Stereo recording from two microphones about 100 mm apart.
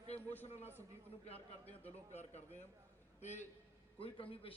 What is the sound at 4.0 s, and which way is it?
Speech, 70° left (ahead or behind).